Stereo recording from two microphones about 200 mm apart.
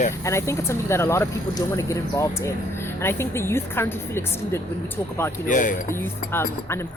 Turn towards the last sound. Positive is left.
turn(degrees=10)  # may be behind; listen again after turning